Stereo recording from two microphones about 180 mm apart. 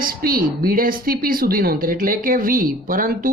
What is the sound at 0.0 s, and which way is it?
Speech, 55° right (ahead or behind).